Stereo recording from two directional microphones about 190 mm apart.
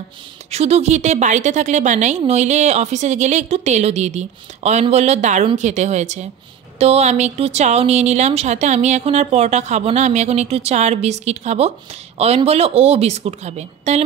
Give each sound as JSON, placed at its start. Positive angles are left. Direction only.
{"t": 0.5, "sound": "a woman's voice", "side_deg": -35}